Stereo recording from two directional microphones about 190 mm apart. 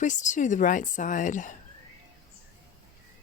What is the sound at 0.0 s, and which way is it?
A woman's voice, 40° left (ahead or behind).